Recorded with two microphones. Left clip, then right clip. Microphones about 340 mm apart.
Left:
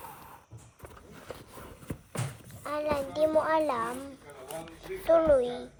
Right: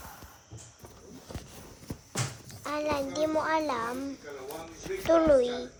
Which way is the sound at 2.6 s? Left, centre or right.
Centre.